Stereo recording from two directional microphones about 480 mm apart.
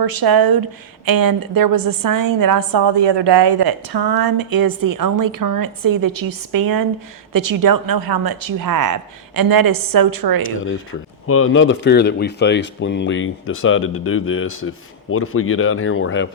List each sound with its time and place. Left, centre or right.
0.0 s a woman's voice: right
11.3 s speech: left